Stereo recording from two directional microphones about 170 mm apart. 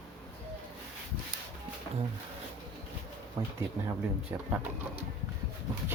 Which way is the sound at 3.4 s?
15° right (ahead or behind).